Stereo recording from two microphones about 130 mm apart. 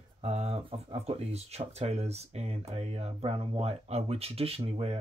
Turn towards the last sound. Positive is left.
turn(degrees=-50)  # may be behind; listen again after turning